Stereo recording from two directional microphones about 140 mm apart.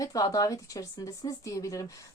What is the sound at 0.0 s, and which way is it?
Speech, 25° left (ahead or behind).